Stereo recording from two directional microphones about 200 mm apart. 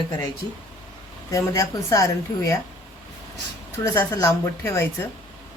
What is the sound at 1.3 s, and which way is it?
Speech, 15° left (ahead or behind).